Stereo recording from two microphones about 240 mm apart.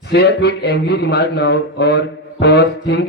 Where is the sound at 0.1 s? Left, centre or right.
Left.